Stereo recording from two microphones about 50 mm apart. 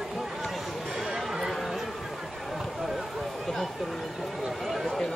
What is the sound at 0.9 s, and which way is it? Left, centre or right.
Chatter, centre.